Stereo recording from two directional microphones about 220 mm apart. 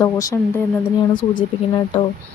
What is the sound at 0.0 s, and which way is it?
Speech, 15° left (ahead or behind).